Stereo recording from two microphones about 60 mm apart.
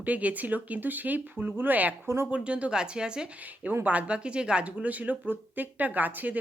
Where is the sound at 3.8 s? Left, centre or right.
Right.